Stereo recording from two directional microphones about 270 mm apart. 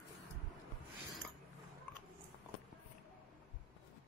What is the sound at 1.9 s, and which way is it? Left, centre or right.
Biting, centre.